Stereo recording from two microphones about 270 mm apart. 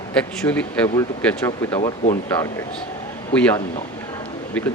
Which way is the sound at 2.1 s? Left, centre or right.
Centre.